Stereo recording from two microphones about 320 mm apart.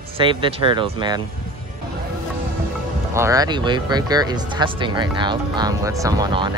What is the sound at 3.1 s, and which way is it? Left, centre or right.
Speech, centre.